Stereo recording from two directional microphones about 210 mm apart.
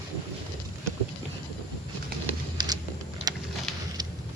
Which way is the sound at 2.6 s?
20° right (ahead or behind).